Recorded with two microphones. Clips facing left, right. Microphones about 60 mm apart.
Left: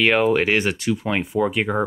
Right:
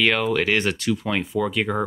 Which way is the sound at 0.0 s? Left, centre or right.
Left.